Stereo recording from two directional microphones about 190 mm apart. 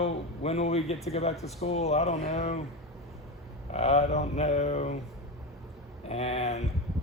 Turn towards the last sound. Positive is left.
turn(degrees=35)  # may be behind; listen again after turning